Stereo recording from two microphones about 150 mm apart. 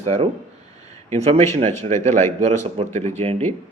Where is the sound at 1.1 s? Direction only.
45° right (ahead or behind).